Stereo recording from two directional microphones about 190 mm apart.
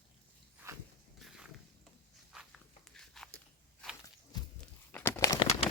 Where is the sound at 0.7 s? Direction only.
15° right (ahead or behind).